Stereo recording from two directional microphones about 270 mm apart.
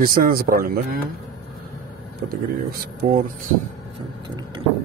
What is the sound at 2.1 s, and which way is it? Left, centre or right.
Speech, right.